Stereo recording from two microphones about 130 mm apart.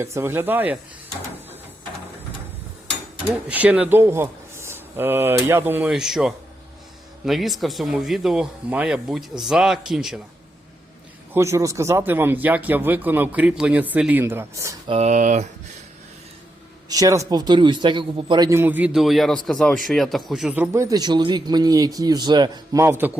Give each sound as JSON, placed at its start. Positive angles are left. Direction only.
{"t": 0.0, "sound": "speech", "side_deg": -20}
{"t": 3.5, "sound": "a man's voice", "side_deg": -10}
{"t": 5.9, "sound": "speech", "side_deg": -5}
{"t": 11.3, "sound": "a man's voice", "side_deg": -20}
{"t": 14.8, "sound": "speech", "side_deg": -55}
{"t": 16.9, "sound": "speech", "side_deg": -25}
{"t": 18.4, "sound": "speech", "side_deg": -15}
{"t": 20.6, "sound": "speech", "side_deg": -20}
{"t": 22.8, "sound": "a man's voice", "side_deg": -15}